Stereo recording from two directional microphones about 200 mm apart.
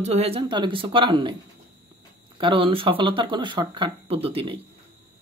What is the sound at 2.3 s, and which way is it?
Speech, 25° right (ahead or behind).